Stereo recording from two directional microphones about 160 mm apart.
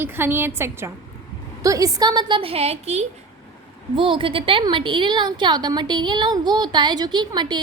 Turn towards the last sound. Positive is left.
turn(degrees=-25)  # may be behind; listen again after turning